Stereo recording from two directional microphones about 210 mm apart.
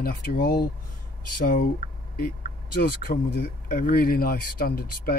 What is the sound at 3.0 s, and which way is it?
Speech, 45° left (ahead or behind).